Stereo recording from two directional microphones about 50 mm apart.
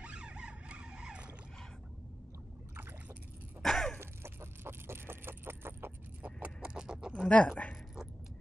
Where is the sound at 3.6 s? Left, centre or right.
Centre.